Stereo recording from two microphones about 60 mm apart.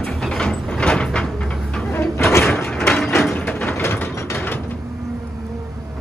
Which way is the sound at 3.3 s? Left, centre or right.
Left.